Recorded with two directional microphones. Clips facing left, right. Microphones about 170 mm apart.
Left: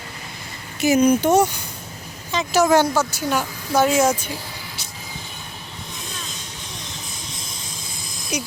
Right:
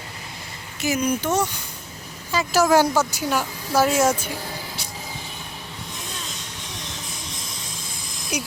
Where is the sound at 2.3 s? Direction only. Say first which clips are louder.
Left 1 dB; 5° right (ahead or behind).